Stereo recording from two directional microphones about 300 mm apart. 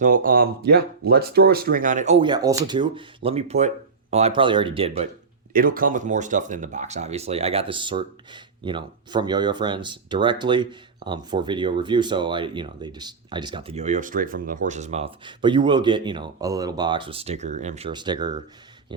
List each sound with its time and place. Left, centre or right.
0.0 s speech: right
5.5 s speech: right